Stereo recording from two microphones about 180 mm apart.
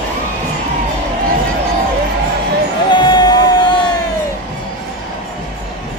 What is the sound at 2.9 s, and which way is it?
Music, 25° left (ahead or behind).